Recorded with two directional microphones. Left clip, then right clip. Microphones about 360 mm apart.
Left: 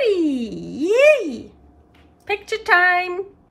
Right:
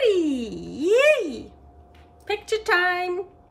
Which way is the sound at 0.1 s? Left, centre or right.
Centre.